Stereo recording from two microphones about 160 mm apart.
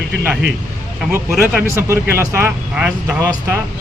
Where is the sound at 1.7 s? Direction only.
15° right (ahead or behind).